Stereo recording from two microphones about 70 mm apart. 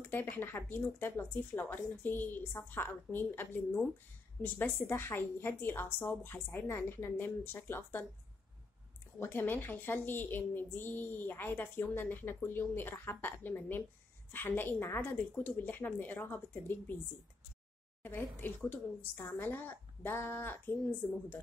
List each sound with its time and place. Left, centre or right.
0.0 s a woman's voice: left
9.2 s speech: left
18.0 s a woman's voice: left